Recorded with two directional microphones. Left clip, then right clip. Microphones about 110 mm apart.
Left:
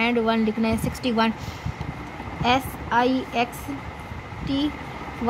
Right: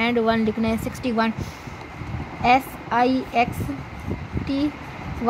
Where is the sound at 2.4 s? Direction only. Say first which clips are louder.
Right 4 dB; 25° right (ahead or behind).